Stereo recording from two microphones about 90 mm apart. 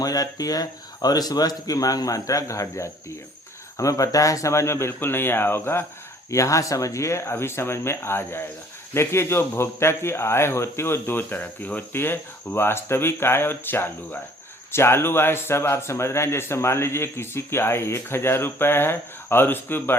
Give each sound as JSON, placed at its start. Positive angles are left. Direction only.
{"t": 0.0, "sound": "speech", "side_deg": 45}